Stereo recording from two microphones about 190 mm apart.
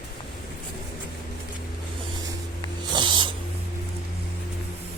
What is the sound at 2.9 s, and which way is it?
Snake, 25° right (ahead or behind).